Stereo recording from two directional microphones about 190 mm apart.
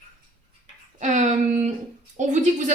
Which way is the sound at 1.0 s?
40° right (ahead or behind).